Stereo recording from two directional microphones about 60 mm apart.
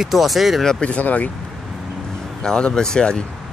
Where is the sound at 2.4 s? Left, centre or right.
Centre.